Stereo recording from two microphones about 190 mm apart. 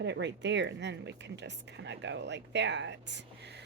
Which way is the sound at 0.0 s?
65° right (ahead or behind).